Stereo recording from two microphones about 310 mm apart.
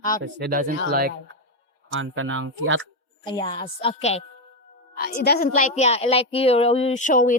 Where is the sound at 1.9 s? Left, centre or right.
Right.